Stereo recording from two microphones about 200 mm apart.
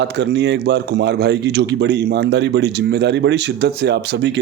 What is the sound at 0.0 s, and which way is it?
A man's voice, 55° right (ahead or behind).